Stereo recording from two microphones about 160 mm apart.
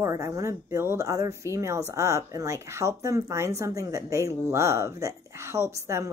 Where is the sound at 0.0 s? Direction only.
20° right (ahead or behind).